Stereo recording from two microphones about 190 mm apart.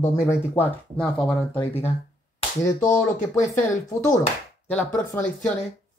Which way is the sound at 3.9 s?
15° left (ahead or behind).